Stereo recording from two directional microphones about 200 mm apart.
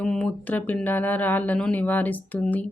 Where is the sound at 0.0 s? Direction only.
5° left (ahead or behind).